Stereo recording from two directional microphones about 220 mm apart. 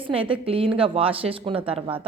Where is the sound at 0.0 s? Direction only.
25° right (ahead or behind).